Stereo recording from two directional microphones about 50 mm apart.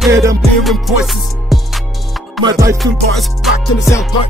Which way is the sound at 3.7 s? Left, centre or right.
Left.